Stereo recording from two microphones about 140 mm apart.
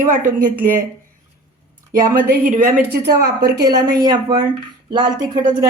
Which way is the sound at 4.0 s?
30° right (ahead or behind).